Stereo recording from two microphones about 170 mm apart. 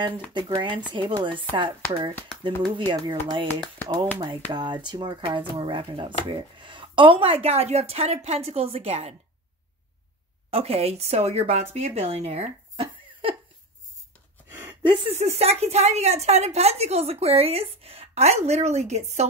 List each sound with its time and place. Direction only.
0.3 s speech: 25° right (ahead or behind)
4.5 s a woman's voice: 25° right (ahead or behind)
10.5 s a woman's voice: 35° right (ahead or behind)
15.1 s a woman's voice: 40° right (ahead or behind)